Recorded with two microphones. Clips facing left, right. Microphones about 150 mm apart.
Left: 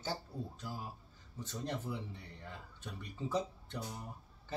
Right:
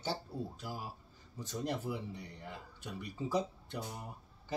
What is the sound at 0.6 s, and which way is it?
Speech, 10° right (ahead or behind).